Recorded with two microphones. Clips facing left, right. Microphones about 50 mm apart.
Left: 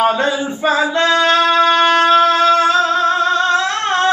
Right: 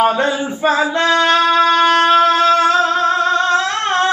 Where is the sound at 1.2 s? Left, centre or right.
Centre.